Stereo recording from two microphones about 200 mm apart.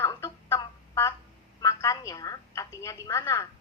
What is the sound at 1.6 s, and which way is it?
A woman's voice, 15° left (ahead or behind).